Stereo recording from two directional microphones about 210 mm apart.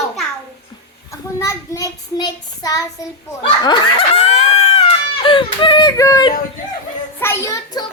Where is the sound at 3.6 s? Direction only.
25° left (ahead or behind).